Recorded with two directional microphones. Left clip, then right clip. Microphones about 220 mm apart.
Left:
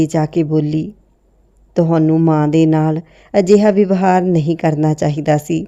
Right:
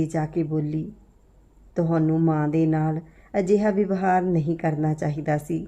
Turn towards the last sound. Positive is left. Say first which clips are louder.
# left 10 dB
turn(degrees=40)  # may be behind; listen again after turning